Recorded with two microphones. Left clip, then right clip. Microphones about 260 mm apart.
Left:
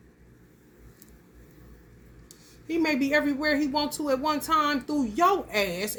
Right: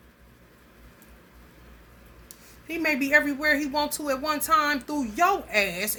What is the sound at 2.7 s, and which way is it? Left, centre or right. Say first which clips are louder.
Speech: right 2 dB; centre.